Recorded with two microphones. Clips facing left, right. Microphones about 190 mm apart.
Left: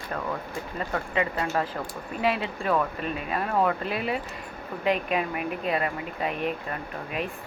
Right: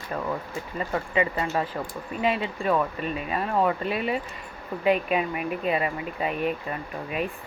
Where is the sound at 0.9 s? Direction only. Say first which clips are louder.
Right 2 dB; 5° right (ahead or behind).